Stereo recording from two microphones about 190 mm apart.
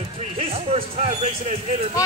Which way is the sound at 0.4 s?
30° right (ahead or behind).